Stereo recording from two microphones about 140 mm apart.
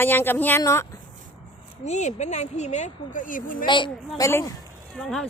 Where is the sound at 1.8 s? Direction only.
55° left (ahead or behind); by 3.5 s 70° left (ahead or behind).